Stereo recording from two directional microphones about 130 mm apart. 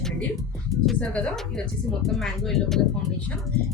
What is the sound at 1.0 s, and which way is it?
A woman's voice, 10° left (ahead or behind).